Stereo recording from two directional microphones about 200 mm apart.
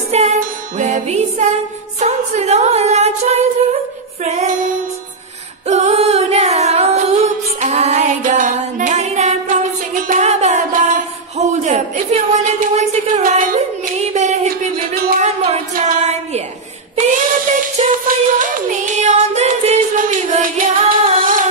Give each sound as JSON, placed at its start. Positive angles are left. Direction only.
{"t": 0.1, "sound": "music", "side_deg": -35}
{"t": 4.2, "sound": "female singing", "side_deg": -35}
{"t": 5.7, "sound": "singing", "side_deg": -35}
{"t": 14.0, "sound": "a sound", "side_deg": -35}
{"t": 15.2, "sound": "music", "side_deg": -30}
{"t": 17.7, "sound": "music", "side_deg": -40}